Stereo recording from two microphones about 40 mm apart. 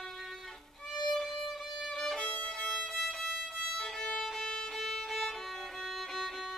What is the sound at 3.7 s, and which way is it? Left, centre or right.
Violin, left.